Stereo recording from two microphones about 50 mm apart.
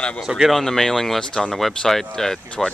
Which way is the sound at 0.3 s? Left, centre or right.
Centre.